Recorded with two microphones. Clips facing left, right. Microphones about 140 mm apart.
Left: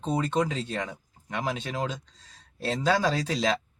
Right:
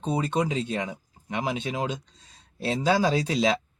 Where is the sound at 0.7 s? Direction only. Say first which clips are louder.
Right 2 dB; 15° right (ahead or behind).